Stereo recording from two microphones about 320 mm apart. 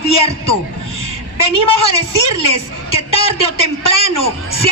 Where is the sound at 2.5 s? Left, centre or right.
Centre.